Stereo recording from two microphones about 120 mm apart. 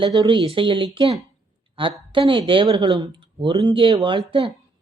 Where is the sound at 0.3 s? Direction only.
45° right (ahead or behind).